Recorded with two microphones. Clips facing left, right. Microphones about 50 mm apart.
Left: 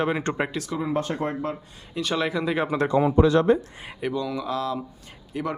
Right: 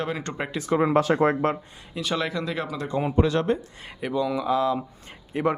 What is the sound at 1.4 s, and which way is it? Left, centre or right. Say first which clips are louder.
Speech: right 6 dB; right.